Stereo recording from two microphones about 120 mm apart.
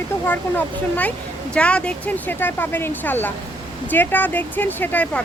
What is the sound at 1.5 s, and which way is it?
Speech, 10° left (ahead or behind).